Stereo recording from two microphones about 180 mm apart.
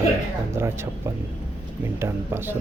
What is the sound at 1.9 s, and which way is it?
Speech, 15° right (ahead or behind).